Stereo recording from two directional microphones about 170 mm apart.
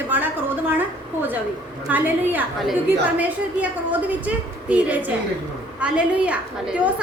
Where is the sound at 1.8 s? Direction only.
10° right (ahead or behind).